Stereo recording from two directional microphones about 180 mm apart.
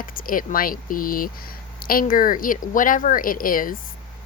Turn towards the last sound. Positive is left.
turn(degrees=50)  # may be behind; listen again after turning